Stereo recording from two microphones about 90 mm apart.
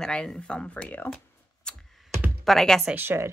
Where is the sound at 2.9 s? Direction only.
25° right (ahead or behind).